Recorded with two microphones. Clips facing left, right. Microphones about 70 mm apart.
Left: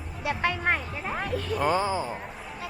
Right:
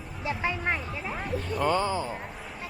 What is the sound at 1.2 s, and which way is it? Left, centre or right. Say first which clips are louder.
Speech: left 2 dB; left.